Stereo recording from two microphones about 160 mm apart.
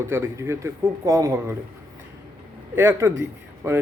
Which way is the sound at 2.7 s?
15° right (ahead or behind).